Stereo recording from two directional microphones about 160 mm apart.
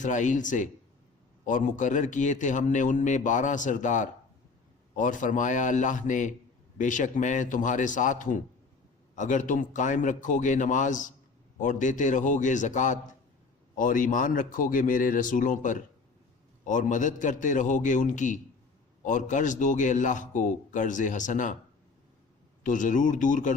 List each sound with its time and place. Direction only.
0.0 s a man's voice: 50° left (ahead or behind)
22.6 s a man's voice: 55° left (ahead or behind)